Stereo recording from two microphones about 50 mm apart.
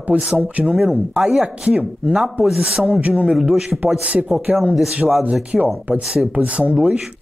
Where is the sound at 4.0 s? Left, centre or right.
Right.